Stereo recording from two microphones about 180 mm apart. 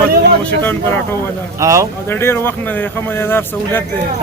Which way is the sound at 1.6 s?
15° right (ahead or behind).